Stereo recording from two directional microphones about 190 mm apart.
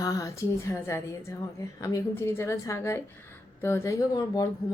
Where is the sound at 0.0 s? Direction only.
15° left (ahead or behind).